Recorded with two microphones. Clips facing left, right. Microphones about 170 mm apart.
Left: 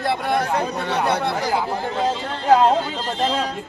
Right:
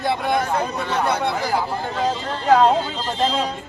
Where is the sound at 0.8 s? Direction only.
65° left (ahead or behind).